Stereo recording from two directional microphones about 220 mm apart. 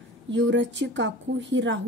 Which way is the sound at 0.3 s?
55° right (ahead or behind).